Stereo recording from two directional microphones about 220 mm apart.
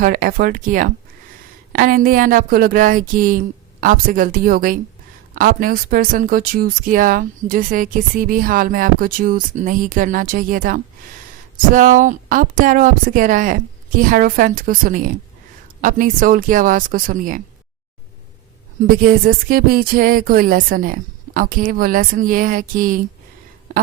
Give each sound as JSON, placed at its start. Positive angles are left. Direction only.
{"t": 0.0, "sound": "a woman's voice", "side_deg": -40}
{"t": 18.8, "sound": "a woman's voice", "side_deg": -35}
{"t": 23.7, "sound": "a sound", "side_deg": -35}